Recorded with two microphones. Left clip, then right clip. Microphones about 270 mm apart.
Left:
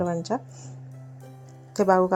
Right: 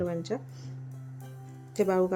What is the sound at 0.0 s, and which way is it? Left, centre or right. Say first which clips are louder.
Speech: left 5 dB; centre.